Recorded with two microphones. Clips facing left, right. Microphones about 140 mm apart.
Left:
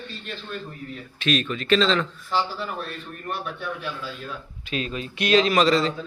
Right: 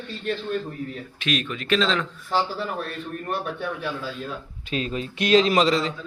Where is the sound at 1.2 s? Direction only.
10° right (ahead or behind).